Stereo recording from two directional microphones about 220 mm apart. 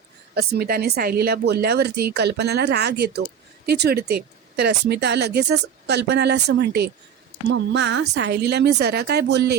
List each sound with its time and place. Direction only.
0.3 s speech: 45° right (ahead or behind)